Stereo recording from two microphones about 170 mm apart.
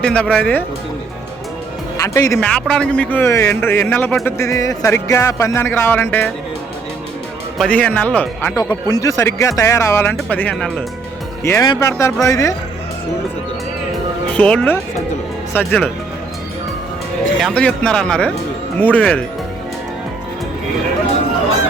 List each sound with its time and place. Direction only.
0.0 s speech: 5° left (ahead or behind)
2.0 s speech: 20° left (ahead or behind)
2.4 s speech: 5° left (ahead or behind)
4.4 s speech: 20° left (ahead or behind)
7.6 s speech: 10° left (ahead or behind)
14.3 s speech: 5° left (ahead or behind)
17.4 s speech: 5° left (ahead or behind)